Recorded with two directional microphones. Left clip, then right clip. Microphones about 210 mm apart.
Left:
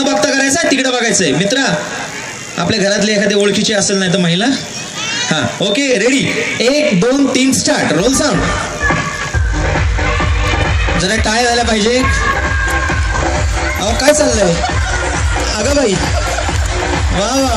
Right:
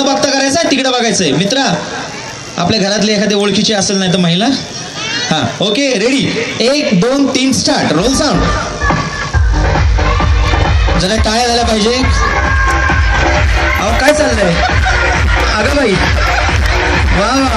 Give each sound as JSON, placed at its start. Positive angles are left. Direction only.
{"t": 0.0, "sound": "a sound", "side_deg": 35}
{"t": 2.6, "sound": "speech", "side_deg": 35}
{"t": 10.6, "sound": "music", "side_deg": 35}
{"t": 13.8, "sound": "speech", "side_deg": 35}
{"t": 15.5, "sound": "speech", "side_deg": 35}
{"t": 17.2, "sound": "speech", "side_deg": 30}